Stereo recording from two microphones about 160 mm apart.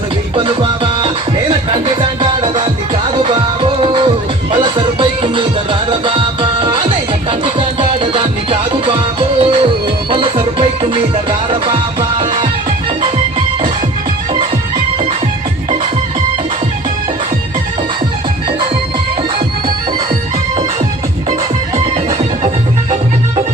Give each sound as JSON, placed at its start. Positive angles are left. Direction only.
{"t": 0.3, "sound": "music", "side_deg": -30}